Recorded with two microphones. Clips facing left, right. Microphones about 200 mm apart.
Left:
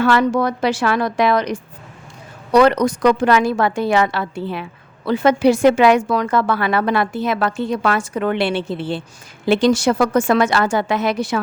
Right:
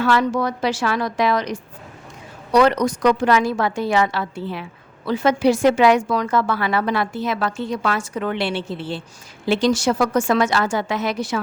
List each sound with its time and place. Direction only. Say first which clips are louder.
0.0 s a woman's voice: left 3 dB; 60° left (ahead or behind)